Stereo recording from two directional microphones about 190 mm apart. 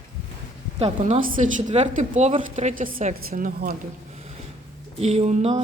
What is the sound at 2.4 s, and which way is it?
A woman's voice, 40° right (ahead or behind).